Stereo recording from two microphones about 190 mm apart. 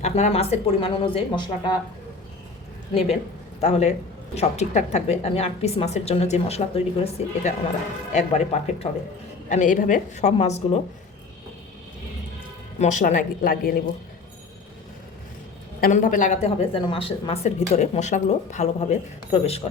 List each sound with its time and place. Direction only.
0.0 s speech: 35° left (ahead or behind)
2.9 s a woman's voice: 25° left (ahead or behind)
12.8 s a woman's voice: 40° left (ahead or behind)
15.8 s a woman's voice: 40° left (ahead or behind)
16.8 s a woman's voice: 30° left (ahead or behind)